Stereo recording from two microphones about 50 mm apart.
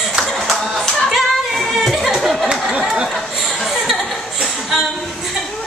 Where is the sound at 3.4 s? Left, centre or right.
Centre.